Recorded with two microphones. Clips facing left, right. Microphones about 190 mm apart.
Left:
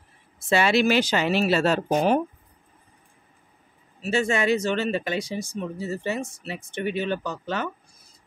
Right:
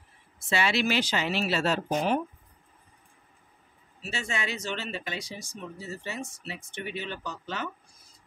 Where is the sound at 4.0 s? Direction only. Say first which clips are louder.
Left 11 dB; 50° left (ahead or behind).